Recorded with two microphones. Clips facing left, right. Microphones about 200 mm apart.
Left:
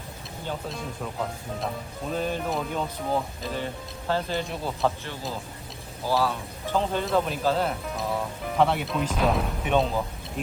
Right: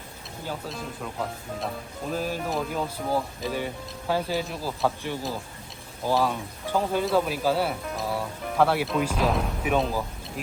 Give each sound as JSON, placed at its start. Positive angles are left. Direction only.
{"t": 0.4, "sound": "speech", "side_deg": 0}
{"t": 6.1, "sound": "speech", "side_deg": -15}